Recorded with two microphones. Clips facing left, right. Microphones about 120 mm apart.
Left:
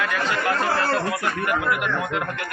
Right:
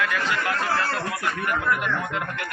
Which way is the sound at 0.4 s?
40° left (ahead or behind).